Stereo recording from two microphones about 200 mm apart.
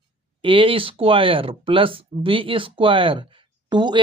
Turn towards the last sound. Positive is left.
turn(degrees=-20)  # may be behind; listen again after turning